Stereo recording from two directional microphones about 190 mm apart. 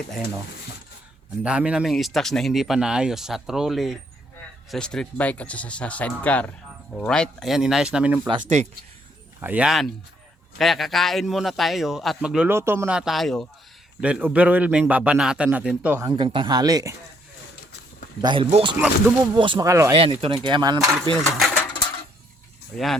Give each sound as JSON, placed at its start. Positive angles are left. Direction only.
{"t": 1.5, "sound": "a man's voice", "side_deg": -5}
{"t": 9.4, "sound": "a man's voice", "side_deg": -5}
{"t": 16.0, "sound": "speech", "side_deg": -25}
{"t": 18.2, "sound": "speech", "side_deg": -25}
{"t": 20.0, "sound": "speech", "side_deg": -25}
{"t": 20.7, "sound": "a man's voice", "side_deg": 0}
{"t": 21.3, "sound": "mechanisms", "side_deg": 5}
{"t": 21.7, "sound": "a sound", "side_deg": 25}
{"t": 22.7, "sound": "a man's voice", "side_deg": 5}